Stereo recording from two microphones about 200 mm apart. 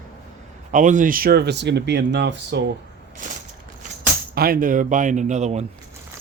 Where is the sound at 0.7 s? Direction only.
40° right (ahead or behind); by 2.7 s 60° right (ahead or behind).